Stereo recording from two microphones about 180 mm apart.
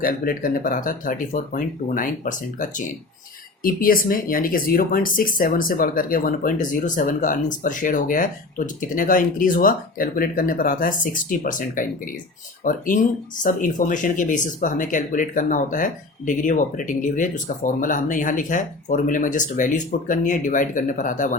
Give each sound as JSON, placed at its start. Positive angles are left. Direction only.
{"t": 0.0, "sound": "speech", "side_deg": 50}